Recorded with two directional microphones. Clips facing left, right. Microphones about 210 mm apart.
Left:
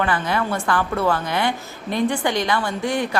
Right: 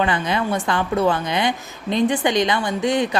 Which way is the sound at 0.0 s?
20° right (ahead or behind).